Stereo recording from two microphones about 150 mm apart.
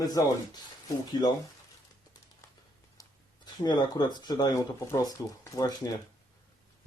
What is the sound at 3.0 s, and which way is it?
Speech, 25° left (ahead or behind).